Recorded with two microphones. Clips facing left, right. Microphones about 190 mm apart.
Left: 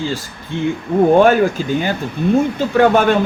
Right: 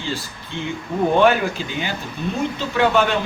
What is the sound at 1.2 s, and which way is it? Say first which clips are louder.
Speech: left 5 dB; 45° left (ahead or behind).